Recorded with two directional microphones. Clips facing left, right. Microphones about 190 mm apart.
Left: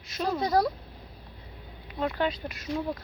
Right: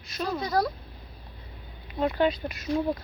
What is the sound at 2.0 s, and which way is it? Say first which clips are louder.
Speech: right 4 dB; 15° right (ahead or behind).